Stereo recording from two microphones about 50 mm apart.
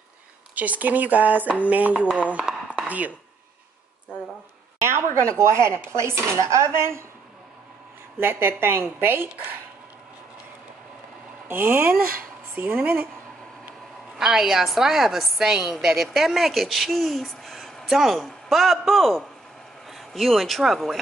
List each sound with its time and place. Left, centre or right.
0.6 s speech: right
2.5 s a sound: centre
4.8 s a woman's voice: right
5.4 s speech: right
8.2 s a woman's voice: right
11.4 s a woman's voice: right
14.1 s a woman's voice: centre